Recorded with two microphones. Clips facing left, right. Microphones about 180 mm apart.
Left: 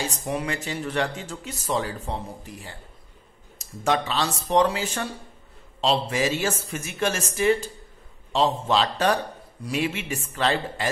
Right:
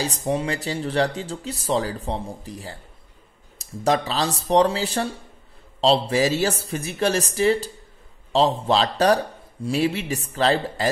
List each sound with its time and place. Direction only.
0.0 s speech: 35° right (ahead or behind)